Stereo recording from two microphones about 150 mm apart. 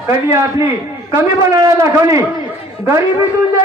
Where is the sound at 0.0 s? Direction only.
20° right (ahead or behind).